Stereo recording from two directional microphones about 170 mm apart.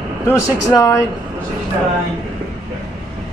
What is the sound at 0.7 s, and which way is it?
Speech, 20° left (ahead or behind).